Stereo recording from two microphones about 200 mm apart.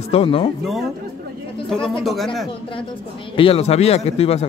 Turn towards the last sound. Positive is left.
turn(degrees=30)  # may be behind; listen again after turning